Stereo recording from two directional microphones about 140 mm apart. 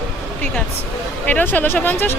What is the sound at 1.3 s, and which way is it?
Speech, 10° left (ahead or behind).